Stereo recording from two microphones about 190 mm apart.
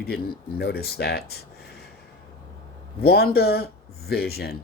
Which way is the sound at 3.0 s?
55° left (ahead or behind).